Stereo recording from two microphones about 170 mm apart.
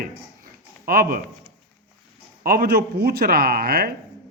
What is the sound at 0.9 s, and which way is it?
Speech, 60° right (ahead or behind).